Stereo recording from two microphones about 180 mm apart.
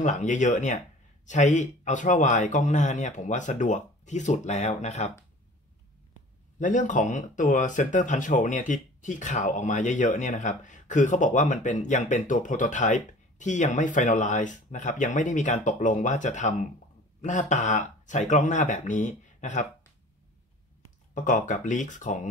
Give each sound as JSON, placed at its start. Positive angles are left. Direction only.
{"t": 0.0, "sound": "speech", "side_deg": 40}
{"t": 6.6, "sound": "speech", "side_deg": 45}
{"t": 21.1, "sound": "speech", "side_deg": 45}